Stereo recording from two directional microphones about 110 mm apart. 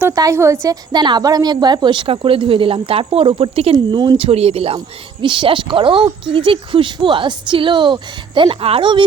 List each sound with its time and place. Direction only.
0.2 s a woman's voice: 25° right (ahead or behind)
0.9 s a woman's voice: 40° right (ahead or behind); by 3.8 s 65° right (ahead or behind)
3.9 s a woman's voice: 45° right (ahead or behind)
4.3 s speech: 65° right (ahead or behind)
5.2 s a woman's voice: 50° right (ahead or behind)